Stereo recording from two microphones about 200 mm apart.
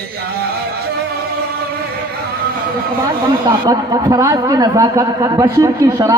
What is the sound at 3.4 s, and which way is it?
A man's voice, 20° right (ahead or behind).